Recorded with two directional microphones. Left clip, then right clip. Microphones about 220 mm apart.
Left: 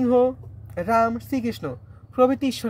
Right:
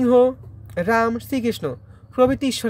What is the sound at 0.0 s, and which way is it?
Speech, 30° right (ahead or behind).